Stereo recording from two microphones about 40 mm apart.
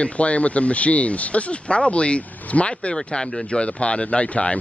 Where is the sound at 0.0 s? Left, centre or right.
Left.